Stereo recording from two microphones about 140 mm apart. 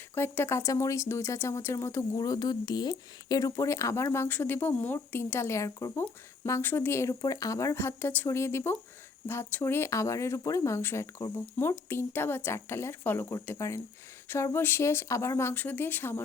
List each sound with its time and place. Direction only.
0.1 s speech: 15° left (ahead or behind)